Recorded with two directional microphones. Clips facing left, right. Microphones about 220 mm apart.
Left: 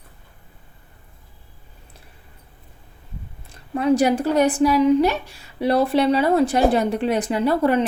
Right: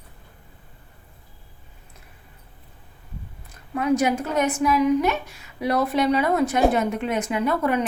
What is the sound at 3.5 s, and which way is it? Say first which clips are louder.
A woman's voice: left 3 dB; 30° left (ahead or behind).